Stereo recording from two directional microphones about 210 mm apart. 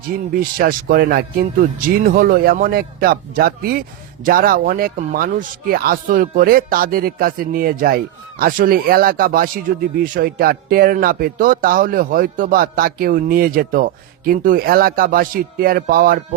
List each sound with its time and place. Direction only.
0.3 s speech: 45° right (ahead or behind)